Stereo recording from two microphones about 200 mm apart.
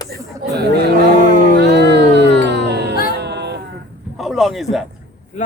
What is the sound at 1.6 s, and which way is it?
Music, 60° right (ahead or behind).